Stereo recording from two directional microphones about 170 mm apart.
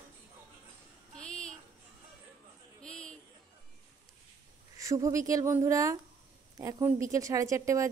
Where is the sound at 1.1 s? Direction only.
5° left (ahead or behind).